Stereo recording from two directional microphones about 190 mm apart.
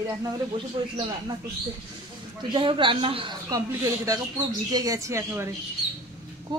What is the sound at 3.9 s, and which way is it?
Speech, 15° right (ahead or behind).